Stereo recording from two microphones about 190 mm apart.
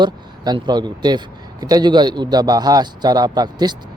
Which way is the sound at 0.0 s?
25° right (ahead or behind).